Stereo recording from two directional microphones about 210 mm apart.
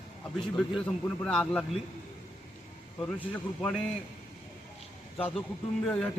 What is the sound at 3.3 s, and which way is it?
Speech, 5° left (ahead or behind).